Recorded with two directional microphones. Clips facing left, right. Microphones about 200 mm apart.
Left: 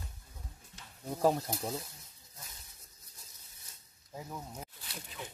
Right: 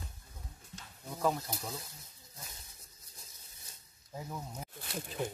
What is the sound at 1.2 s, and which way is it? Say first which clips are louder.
Speech: left 4 dB; 30° left (ahead or behind).